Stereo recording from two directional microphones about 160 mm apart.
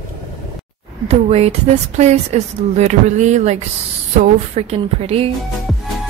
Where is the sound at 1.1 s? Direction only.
40° right (ahead or behind).